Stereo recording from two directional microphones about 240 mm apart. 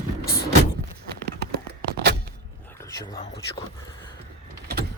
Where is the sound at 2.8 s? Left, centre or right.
Centre.